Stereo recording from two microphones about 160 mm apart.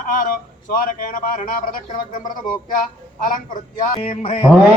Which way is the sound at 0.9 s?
60° left (ahead or behind).